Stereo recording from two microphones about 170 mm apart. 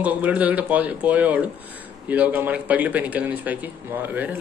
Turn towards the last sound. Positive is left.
turn(degrees=-10)  # may be behind; listen again after turning